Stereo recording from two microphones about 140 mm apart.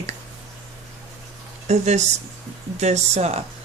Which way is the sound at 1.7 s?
55° right (ahead or behind).